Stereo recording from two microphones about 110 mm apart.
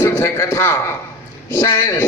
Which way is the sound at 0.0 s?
25° left (ahead or behind).